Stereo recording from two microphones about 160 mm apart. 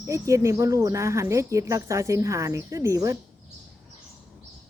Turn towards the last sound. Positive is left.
turn(degrees=-20)  # may be behind; listen again after turning